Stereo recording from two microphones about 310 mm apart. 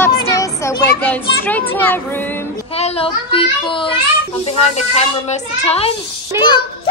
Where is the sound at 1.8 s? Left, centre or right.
Centre.